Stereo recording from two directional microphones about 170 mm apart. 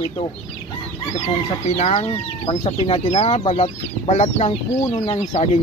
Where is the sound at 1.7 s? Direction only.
35° left (ahead or behind).